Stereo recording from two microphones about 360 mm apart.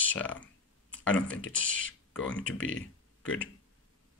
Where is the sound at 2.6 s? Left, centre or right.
Left.